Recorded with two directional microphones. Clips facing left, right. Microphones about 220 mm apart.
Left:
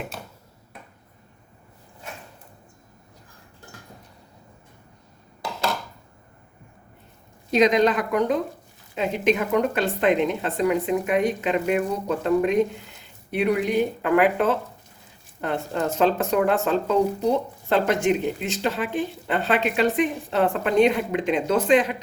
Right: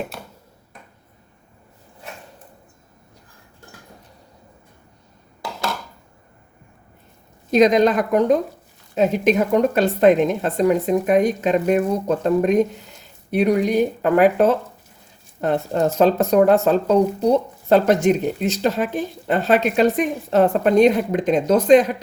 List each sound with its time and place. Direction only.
7.5 s a woman's voice: 45° right (ahead or behind)